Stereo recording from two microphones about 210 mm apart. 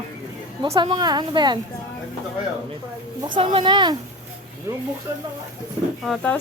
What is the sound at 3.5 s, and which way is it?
Speech, 25° right (ahead or behind).